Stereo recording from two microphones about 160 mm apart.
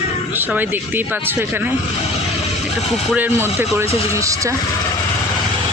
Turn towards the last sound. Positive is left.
turn(degrees=-20)  # may be behind; listen again after turning